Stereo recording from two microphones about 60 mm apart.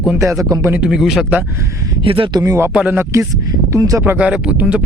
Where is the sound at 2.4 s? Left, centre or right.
Right.